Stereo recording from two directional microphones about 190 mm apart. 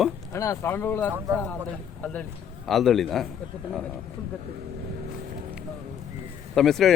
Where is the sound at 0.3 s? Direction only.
15° left (ahead or behind); by 3.2 s centre (ahead or behind).